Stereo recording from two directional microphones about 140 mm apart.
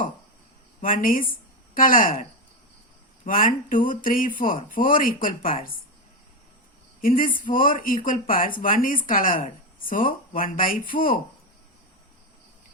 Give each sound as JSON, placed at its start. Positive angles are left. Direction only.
{"t": 0.8, "sound": "speech", "side_deg": 75}
{"t": 3.2, "sound": "speech", "side_deg": 75}
{"t": 7.0, "sound": "speech", "side_deg": 80}